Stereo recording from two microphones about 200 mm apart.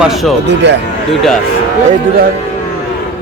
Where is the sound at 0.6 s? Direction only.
60° right (ahead or behind).